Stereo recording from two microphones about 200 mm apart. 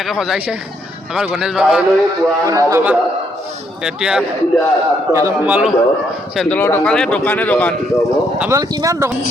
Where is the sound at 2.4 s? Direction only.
15° right (ahead or behind).